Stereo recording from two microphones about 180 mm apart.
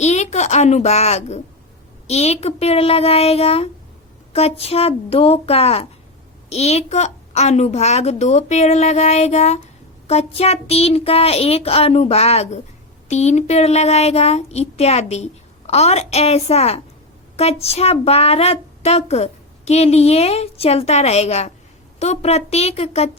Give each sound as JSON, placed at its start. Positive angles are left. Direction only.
{"t": 0.0, "sound": "a woman's voice", "side_deg": 40}